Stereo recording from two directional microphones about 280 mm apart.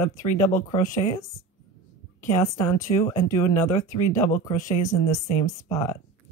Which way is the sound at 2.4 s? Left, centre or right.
Centre.